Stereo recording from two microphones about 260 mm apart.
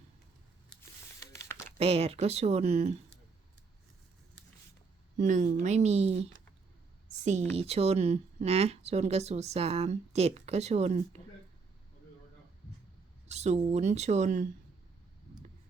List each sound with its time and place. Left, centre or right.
0.8 s a sound: centre
1.8 s speech: right
5.2 s speech: right
7.5 s speech: right
13.2 s speech: right